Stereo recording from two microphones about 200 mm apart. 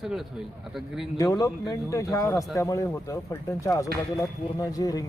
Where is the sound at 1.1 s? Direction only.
15° left (ahead or behind).